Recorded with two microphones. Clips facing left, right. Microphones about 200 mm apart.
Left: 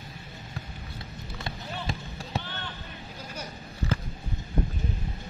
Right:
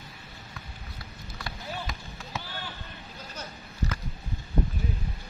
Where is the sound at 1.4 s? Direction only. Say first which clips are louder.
Even; 30° left (ahead or behind).